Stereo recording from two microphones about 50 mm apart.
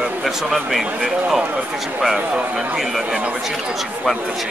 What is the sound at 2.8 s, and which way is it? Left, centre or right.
Speech, centre.